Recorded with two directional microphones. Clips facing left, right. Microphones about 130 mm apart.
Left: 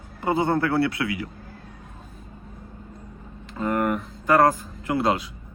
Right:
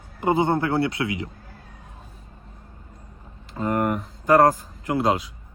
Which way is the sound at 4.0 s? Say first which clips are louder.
Right 2 dB; 40° right (ahead or behind).